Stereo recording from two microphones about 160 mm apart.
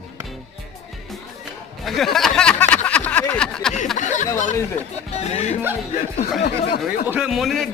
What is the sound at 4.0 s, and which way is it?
Speech, 50° left (ahead or behind).